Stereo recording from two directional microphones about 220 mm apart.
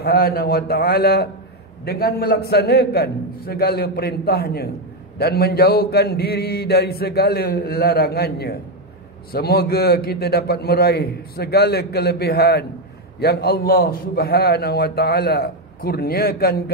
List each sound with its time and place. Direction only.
0.0 s a man's voice: 45° left (ahead or behind)